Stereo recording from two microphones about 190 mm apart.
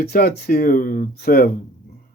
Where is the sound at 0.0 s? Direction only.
55° left (ahead or behind).